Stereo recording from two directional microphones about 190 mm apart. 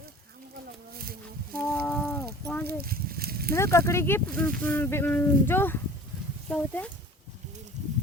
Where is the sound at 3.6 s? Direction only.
15° left (ahead or behind).